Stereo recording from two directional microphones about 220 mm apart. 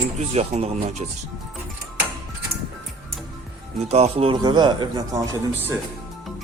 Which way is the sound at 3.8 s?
30° right (ahead or behind).